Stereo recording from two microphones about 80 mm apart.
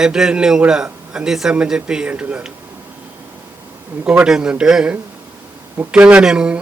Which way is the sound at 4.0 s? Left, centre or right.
Centre.